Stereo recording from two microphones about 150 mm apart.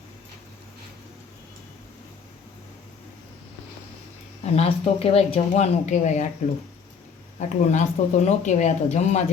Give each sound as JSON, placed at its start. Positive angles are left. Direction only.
{"t": 4.5, "sound": "speech", "side_deg": 40}
{"t": 7.3, "sound": "speech", "side_deg": 50}